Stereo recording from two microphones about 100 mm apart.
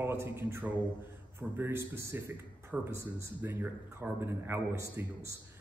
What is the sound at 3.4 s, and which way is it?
A man's voice, 20° right (ahead or behind).